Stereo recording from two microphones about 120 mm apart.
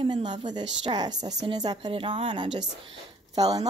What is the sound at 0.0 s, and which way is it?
Speech, 40° right (ahead or behind).